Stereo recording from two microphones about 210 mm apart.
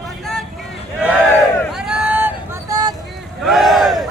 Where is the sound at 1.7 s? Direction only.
5° right (ahead or behind).